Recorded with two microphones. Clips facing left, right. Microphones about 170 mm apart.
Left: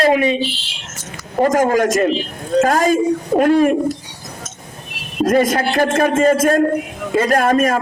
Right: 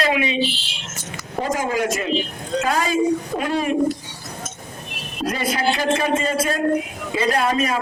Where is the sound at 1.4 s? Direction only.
50° left (ahead or behind).